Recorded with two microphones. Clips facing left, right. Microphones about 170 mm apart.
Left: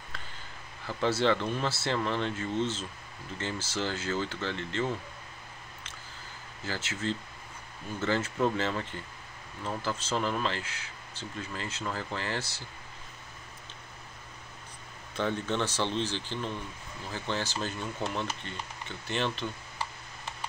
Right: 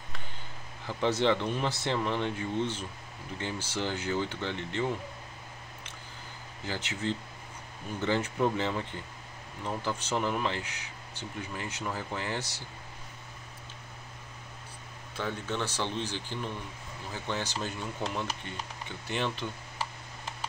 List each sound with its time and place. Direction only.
0.8 s speech: 15° right (ahead or behind)
6.6 s speech: 15° right (ahead or behind)
15.1 s speech: 5° right (ahead or behind)